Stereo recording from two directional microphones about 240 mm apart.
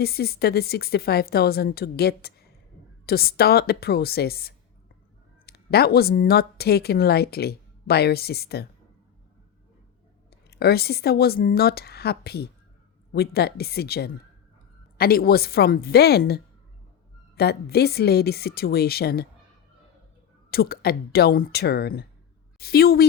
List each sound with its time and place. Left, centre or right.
0.0 s speech: left
10.5 s speech: left
20.5 s speech: left